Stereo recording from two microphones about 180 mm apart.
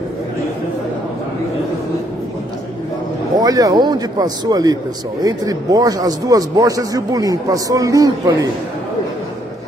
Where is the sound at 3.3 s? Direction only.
20° right (ahead or behind).